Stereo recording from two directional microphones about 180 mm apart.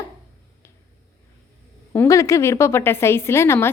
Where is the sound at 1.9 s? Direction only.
15° left (ahead or behind).